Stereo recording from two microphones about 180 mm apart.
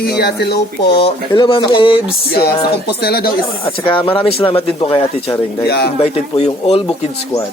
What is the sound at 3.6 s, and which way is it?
A man's voice, 30° left (ahead or behind).